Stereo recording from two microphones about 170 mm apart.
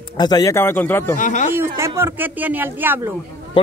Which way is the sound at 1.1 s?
50° left (ahead or behind).